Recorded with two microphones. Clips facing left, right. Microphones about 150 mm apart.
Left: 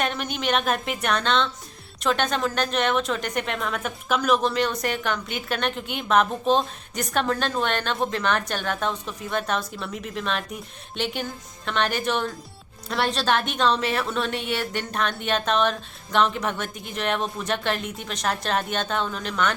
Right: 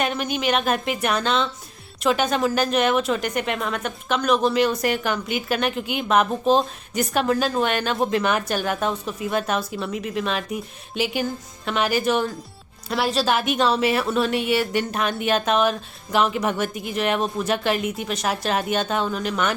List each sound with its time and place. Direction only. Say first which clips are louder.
0.0 s a woman's voice: right 3 dB; centre (ahead or behind)